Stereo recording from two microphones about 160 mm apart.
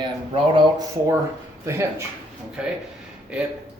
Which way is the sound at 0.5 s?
25° right (ahead or behind).